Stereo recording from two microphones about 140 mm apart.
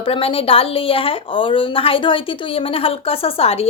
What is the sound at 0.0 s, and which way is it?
Speech, 40° left (ahead or behind).